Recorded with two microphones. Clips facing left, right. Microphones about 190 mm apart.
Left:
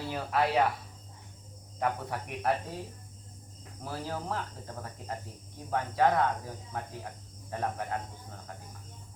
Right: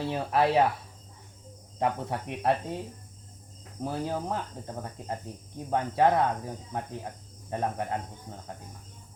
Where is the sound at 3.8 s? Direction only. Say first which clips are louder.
Right 6 dB; 20° right (ahead or behind).